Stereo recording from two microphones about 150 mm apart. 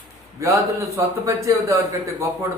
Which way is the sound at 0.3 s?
20° right (ahead or behind).